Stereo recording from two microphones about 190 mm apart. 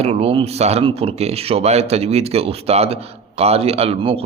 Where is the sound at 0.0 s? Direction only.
30° right (ahead or behind).